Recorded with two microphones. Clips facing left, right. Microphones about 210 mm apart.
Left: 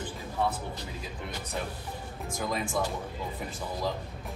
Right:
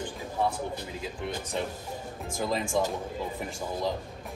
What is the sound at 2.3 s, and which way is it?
Speech, 25° right (ahead or behind).